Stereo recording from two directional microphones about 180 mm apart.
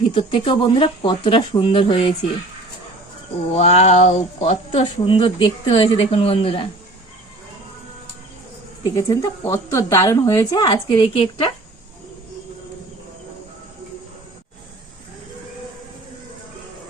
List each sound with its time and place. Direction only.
0.1 s a woman's voice: 30° left (ahead or behind)
3.5 s speech: 40° left (ahead or behind)
8.8 s a woman's voice: 20° left (ahead or behind)